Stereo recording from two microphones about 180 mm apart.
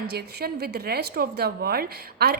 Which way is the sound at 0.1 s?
65° right (ahead or behind).